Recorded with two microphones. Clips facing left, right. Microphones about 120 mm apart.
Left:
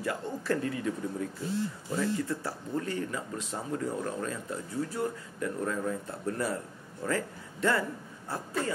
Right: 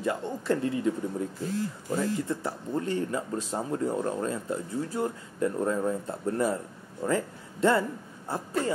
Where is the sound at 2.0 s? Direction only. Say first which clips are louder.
Right 1 dB; 25° right (ahead or behind).